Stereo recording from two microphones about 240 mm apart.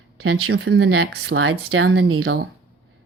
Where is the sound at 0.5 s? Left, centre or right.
Right.